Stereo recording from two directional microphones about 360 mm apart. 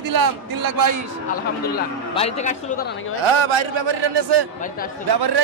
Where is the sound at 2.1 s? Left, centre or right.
Centre.